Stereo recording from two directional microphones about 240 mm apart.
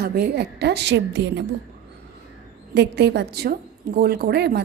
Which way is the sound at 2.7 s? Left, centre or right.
Right.